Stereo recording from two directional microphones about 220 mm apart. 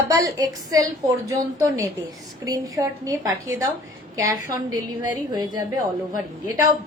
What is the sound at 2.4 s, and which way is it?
A woman's voice, 15° right (ahead or behind).